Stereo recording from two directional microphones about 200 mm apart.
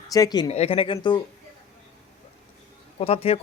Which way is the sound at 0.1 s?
20° left (ahead or behind).